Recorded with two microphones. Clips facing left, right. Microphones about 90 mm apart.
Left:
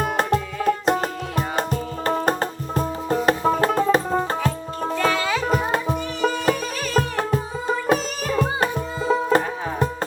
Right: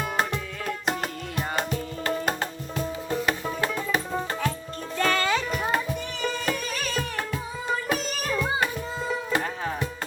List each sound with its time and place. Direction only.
0.0 s music: 45° left (ahead or behind)
4.9 s music: 5° left (ahead or behind)
5.4 s music: 40° left (ahead or behind)